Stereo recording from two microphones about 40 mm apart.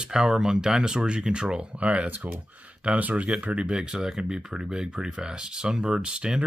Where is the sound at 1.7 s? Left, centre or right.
Right.